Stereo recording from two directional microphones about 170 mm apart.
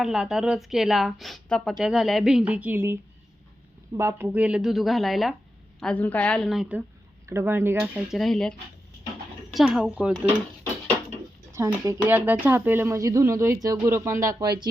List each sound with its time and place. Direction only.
0.0 s a woman's voice: 5° right (ahead or behind)
8.1 s a woman's voice: centre (ahead or behind)
11.5 s speech: 15° right (ahead or behind)